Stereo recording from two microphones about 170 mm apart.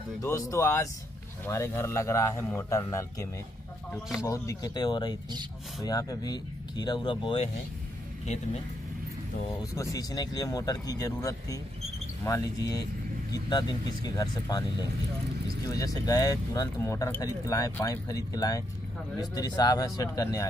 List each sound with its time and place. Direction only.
0.2 s a man's voice: 20° left (ahead or behind)
9.8 s speech: 20° left (ahead or behind)